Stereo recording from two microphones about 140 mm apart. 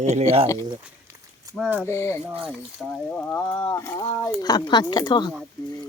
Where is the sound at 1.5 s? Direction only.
25° right (ahead or behind).